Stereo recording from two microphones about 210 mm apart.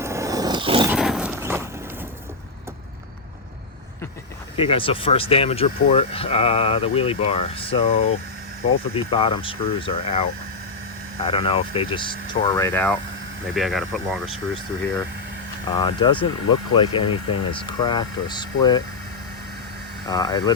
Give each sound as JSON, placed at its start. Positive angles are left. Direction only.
{"t": 0.0, "sound": "roaring cats", "side_deg": -15}
{"t": 0.9, "sound": "a sound", "side_deg": 0}
{"t": 4.5, "sound": "speech", "side_deg": 25}
{"t": 15.7, "sound": "speech", "side_deg": 25}
{"t": 20.1, "sound": "speech", "side_deg": 20}